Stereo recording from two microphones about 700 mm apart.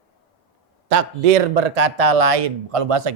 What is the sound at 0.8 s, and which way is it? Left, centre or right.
Speech, right.